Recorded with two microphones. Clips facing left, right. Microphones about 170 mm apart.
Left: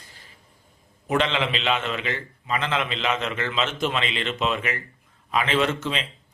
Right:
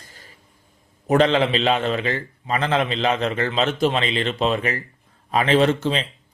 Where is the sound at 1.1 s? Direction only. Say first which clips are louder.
Right 7 dB; 40° right (ahead or behind).